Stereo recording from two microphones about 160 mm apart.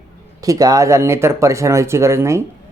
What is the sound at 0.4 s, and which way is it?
Speech, 20° right (ahead or behind).